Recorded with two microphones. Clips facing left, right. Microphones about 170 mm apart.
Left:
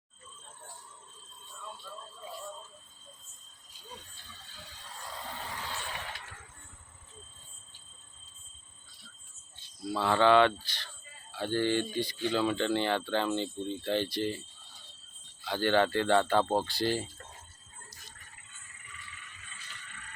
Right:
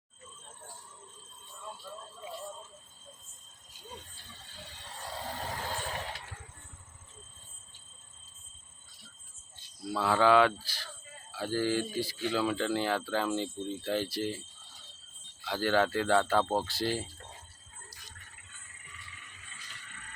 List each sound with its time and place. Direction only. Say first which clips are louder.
5.1 s vehicle: right 4 dB; 40° right (ahead or behind)
9.9 s speech: left 1 dB; 5° right (ahead or behind)
15.4 s speech: left 1 dB; centre (ahead or behind)